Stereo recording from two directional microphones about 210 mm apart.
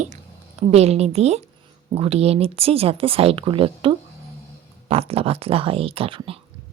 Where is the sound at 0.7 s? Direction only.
30° right (ahead or behind).